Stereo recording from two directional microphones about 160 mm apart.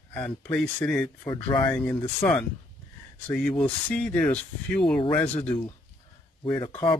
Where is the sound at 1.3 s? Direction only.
30° left (ahead or behind).